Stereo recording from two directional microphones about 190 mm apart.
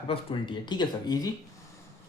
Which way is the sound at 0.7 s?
20° left (ahead or behind).